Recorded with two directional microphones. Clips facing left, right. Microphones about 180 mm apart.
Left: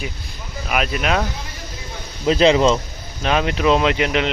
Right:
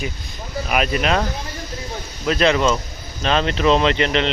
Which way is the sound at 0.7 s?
Centre (ahead or behind).